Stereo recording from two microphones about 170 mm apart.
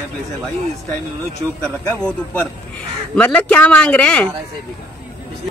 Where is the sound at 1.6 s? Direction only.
5° left (ahead or behind).